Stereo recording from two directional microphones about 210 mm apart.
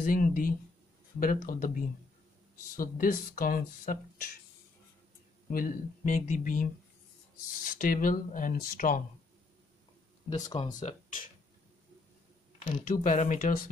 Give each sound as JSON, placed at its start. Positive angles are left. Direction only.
{"t": 0.0, "sound": "speech", "side_deg": 40}
{"t": 5.5, "sound": "speech", "side_deg": 40}
{"t": 10.4, "sound": "speech", "side_deg": 25}
{"t": 10.7, "sound": "speech", "side_deg": 35}
{"t": 12.8, "sound": "speech", "side_deg": 40}